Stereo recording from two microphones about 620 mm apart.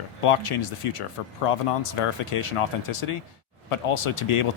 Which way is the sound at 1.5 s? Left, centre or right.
Left.